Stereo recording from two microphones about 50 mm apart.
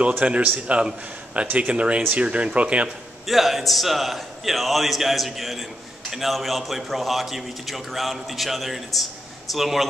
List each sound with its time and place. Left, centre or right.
0.2 s a man's voice: right
3.3 s a man's voice: centre